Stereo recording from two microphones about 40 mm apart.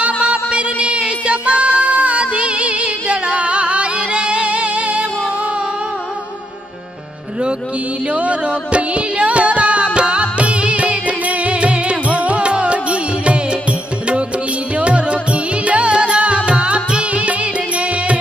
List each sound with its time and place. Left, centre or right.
0.3 s music: right
8.0 s music: right
14.8 s music: right